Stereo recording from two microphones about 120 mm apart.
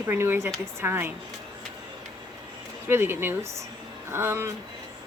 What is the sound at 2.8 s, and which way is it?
A woman's voice, 20° right (ahead or behind).